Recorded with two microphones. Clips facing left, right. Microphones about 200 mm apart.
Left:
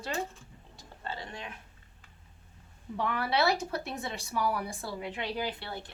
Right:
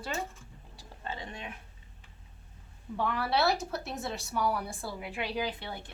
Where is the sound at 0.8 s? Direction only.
20° right (ahead or behind).